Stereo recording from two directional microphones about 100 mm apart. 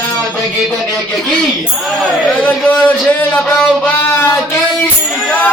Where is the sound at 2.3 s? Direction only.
15° left (ahead or behind).